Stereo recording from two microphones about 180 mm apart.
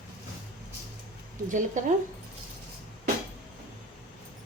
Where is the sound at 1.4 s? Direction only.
45° right (ahead or behind).